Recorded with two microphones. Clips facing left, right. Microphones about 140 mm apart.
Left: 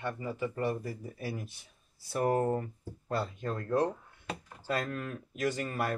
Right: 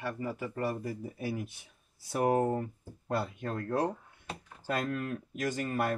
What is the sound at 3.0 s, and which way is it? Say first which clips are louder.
Speech: even; 55° right (ahead or behind).